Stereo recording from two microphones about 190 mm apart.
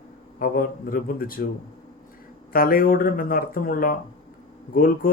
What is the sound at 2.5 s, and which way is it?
Speech, 50° left (ahead or behind).